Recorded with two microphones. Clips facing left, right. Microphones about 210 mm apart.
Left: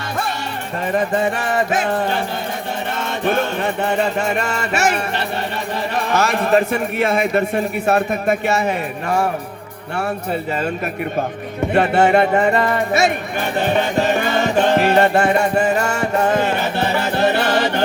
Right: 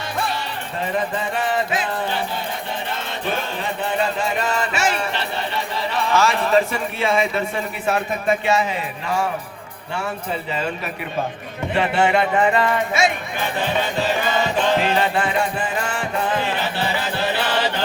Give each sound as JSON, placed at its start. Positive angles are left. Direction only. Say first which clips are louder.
{"t": 0.9, "sound": "chant", "louder": "left 6 dB", "side_deg": 50}
{"t": 3.0, "sound": "chant", "louder": "left 11 dB", "side_deg": 50}
{"t": 4.8, "sound": "chant", "louder": "left 3 dB", "side_deg": 45}
{"t": 6.0, "sound": "a man's voice", "louder": "even", "side_deg": 55}
{"t": 11.7, "sound": "chant", "louder": "left 4 dB", "side_deg": 45}
{"t": 13.6, "sound": "music", "louder": "left 5 dB", "side_deg": 50}